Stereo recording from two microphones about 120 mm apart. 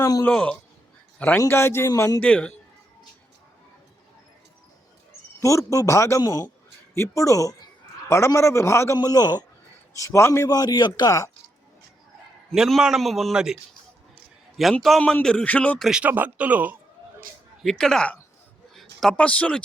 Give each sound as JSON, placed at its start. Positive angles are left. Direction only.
{"t": 0.0, "sound": "speech", "side_deg": 30}
{"t": 0.3, "sound": "a man's voice", "side_deg": 5}
{"t": 1.5, "sound": "a man's voice", "side_deg": 20}
{"t": 2.2, "sound": "a man's voice", "side_deg": 10}
{"t": 5.4, "sound": "a man's voice", "side_deg": 25}
{"t": 9.0, "sound": "a man's voice", "side_deg": 35}
{"t": 10.0, "sound": "a man's voice", "side_deg": 25}
{"t": 12.5, "sound": "a man's voice", "side_deg": 0}
{"t": 14.6, "sound": "a man's voice", "side_deg": 0}
{"t": 15.8, "sound": "speech", "side_deg": -5}
{"t": 17.6, "sound": "a man's voice", "side_deg": 5}